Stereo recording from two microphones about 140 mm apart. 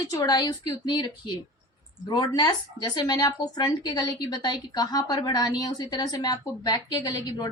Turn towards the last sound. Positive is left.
turn(degrees=30)  # may be behind; listen again after turning